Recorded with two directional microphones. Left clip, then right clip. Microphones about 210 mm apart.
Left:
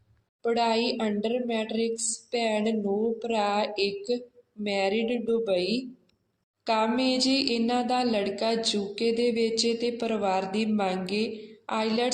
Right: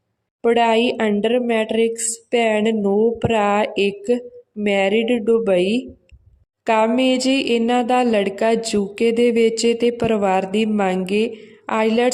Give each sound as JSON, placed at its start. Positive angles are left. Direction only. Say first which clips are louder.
{"t": 0.4, "sound": "speech", "louder": "right 10 dB", "side_deg": -50}